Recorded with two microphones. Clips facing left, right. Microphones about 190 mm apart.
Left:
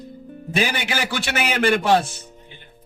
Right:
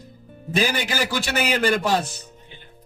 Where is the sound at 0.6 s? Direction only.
40° right (ahead or behind).